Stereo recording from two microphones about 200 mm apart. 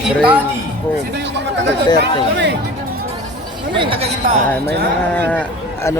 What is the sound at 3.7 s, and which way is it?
Speech, 25° right (ahead or behind).